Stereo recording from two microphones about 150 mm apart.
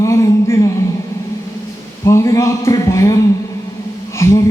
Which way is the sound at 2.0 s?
20° left (ahead or behind).